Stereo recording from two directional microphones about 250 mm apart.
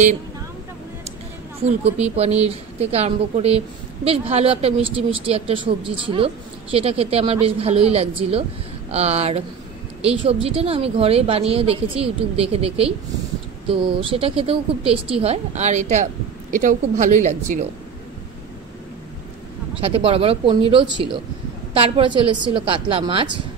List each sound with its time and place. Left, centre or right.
1.6 s speech: right
14.0 s speech: right
19.8 s speech: right